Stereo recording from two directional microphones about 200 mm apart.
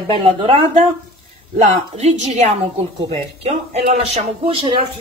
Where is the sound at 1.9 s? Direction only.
35° right (ahead or behind).